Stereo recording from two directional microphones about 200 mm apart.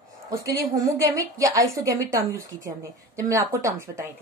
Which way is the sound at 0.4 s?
15° right (ahead or behind).